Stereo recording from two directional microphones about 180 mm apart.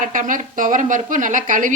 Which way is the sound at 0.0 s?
50° right (ahead or behind).